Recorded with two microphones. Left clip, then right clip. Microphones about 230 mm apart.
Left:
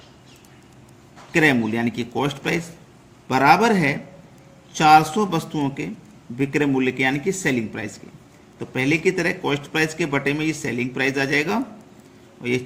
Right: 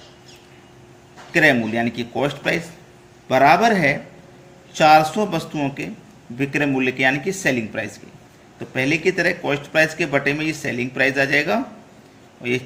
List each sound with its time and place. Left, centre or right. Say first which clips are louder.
1.3 s a man's voice: right 2 dB; centre